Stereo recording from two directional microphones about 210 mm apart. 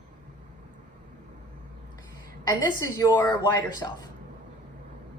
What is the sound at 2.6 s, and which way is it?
A woman's voice, 15° left (ahead or behind).